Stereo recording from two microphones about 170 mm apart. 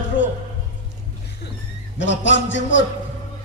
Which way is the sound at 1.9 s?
90° left.